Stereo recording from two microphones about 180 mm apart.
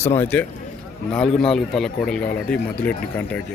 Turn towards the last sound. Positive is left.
turn(degrees=10)  # may be behind; listen again after turning